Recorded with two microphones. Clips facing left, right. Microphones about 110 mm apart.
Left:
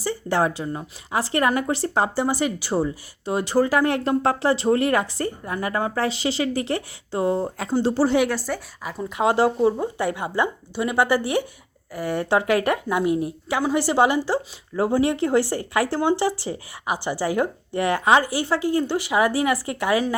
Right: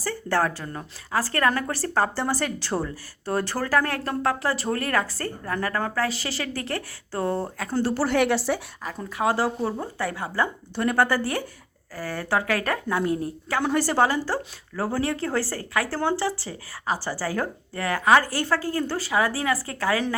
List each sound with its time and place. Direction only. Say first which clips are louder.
0.0 s speech: left 2 dB; 20° left (ahead or behind)
8.2 s speech: right 1 dB; centre (ahead or behind)
9.0 s speech: left 4 dB; 25° left (ahead or behind)